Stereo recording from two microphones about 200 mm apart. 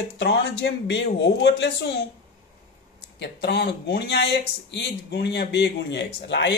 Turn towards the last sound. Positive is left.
turn(degrees=60)  # may be behind; listen again after turning